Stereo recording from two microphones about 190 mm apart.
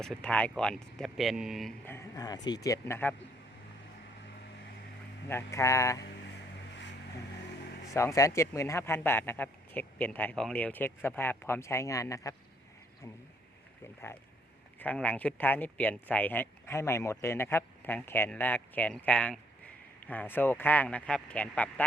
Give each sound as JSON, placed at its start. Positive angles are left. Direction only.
{"t": 0.0, "sound": "speech", "side_deg": 5}
{"t": 1.9, "sound": "a man's voice", "side_deg": 15}
{"t": 5.3, "sound": "speech", "side_deg": 15}
{"t": 7.9, "sound": "speech", "side_deg": 15}
{"t": 14.8, "sound": "speech", "side_deg": 10}